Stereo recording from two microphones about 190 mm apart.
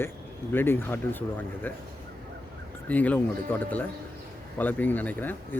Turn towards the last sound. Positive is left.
turn(degrees=10)  # may be behind; listen again after turning